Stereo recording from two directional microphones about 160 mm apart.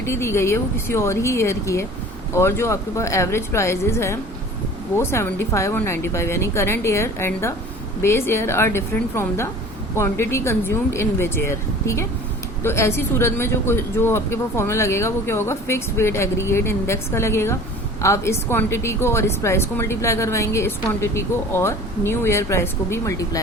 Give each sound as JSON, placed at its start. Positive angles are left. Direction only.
{"t": 0.0, "sound": "a woman's voice", "side_deg": 15}